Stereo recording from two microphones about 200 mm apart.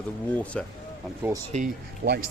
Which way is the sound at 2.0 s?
45° right (ahead or behind).